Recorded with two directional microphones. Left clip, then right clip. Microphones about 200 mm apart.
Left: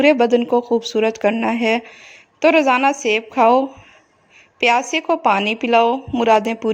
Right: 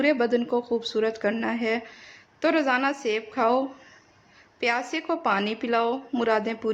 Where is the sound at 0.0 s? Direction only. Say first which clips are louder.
Left 9 dB; 30° left (ahead or behind).